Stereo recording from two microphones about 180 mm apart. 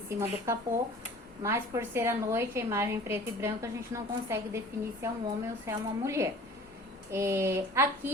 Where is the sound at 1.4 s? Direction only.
15° right (ahead or behind).